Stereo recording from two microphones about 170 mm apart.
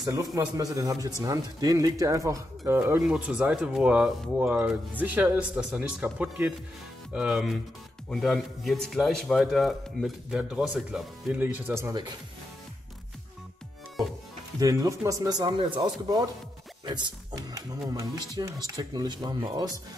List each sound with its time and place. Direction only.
0.0 s a man's voice: 20° right (ahead or behind)
14.6 s speech: 20° right (ahead or behind)